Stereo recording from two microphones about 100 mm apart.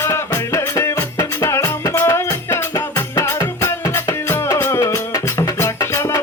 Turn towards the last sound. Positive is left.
turn(degrees=30)  # may be behind; listen again after turning